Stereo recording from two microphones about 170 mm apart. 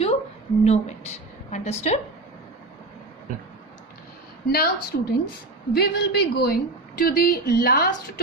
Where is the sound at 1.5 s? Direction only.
40° left (ahead or behind).